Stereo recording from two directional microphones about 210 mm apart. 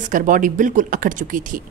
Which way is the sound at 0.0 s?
40° right (ahead or behind).